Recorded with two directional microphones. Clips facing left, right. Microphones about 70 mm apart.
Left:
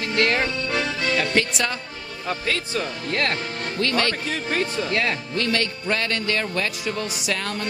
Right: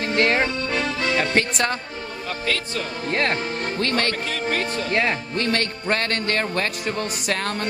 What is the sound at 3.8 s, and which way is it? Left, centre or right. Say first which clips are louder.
Speech: left 1 dB; right.